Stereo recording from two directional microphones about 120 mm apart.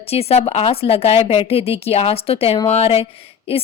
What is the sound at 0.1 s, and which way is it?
Speech, 55° left (ahead or behind).